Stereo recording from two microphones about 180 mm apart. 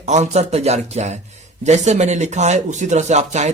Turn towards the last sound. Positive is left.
turn(degrees=-40)  # may be behind; listen again after turning